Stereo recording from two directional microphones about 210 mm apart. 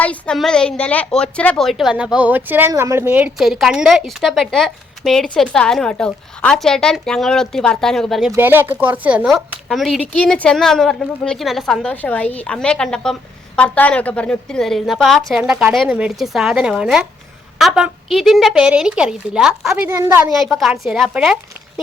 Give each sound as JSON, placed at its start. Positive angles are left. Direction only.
{"t": 0.0, "sound": "a woman's voice", "side_deg": 5}
{"t": 8.3, "sound": "a woman's voice", "side_deg": -10}
{"t": 19.9, "sound": "speech", "side_deg": -15}
{"t": 20.3, "sound": "a woman's voice", "side_deg": 0}